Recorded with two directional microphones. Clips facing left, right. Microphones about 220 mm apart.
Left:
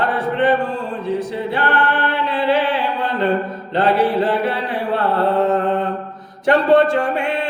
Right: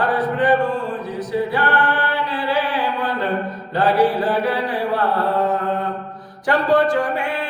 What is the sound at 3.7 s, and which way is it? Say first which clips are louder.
Mantra: left 1 dB; 25° left (ahead or behind).